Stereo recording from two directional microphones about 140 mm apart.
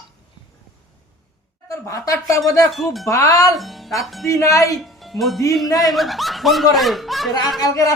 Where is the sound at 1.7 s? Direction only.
25° left (ahead or behind).